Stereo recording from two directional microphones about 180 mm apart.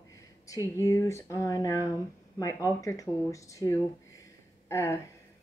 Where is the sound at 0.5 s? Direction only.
15° left (ahead or behind).